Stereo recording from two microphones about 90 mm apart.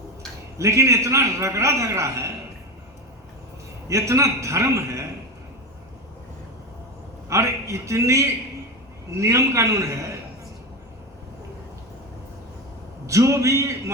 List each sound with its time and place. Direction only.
0.6 s a man's voice: 35° right (ahead or behind)
3.8 s a man's voice: 35° right (ahead or behind)
7.3 s a man's voice: 35° right (ahead or behind)
13.1 s a man's voice: 35° right (ahead or behind)